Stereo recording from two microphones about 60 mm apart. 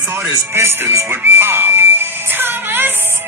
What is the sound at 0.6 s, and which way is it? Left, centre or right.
Music, right.